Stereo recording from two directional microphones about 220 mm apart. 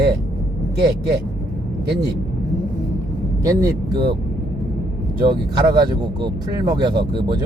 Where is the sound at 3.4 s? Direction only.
15° right (ahead or behind).